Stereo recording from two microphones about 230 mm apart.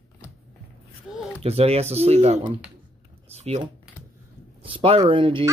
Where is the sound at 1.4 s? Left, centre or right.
Right.